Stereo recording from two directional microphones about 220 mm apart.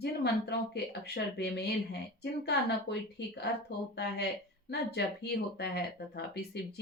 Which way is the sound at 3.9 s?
50° left (ahead or behind).